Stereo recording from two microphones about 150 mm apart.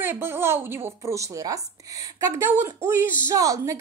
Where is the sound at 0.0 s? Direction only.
15° right (ahead or behind).